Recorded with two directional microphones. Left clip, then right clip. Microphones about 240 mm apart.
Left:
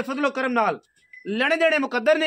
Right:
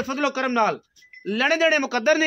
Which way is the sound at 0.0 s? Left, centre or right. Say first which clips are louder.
Even; centre.